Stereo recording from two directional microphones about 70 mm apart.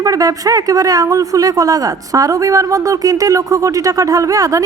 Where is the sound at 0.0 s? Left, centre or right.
Right.